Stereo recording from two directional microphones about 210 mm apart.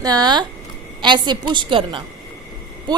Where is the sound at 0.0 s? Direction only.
20° right (ahead or behind).